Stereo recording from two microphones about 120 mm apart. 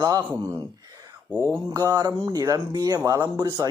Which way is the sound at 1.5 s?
30° right (ahead or behind).